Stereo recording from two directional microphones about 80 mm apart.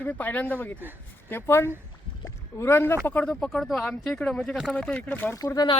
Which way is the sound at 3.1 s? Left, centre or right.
Centre.